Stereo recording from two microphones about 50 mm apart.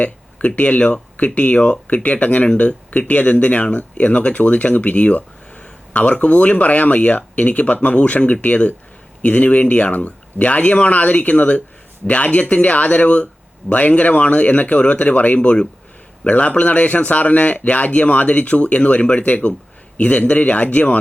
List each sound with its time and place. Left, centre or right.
0.0 s speech: left